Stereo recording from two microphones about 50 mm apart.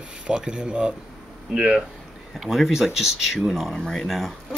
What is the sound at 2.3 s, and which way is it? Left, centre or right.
Speech, centre.